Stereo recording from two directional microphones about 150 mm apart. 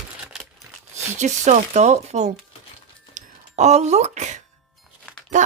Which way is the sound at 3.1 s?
50° right (ahead or behind).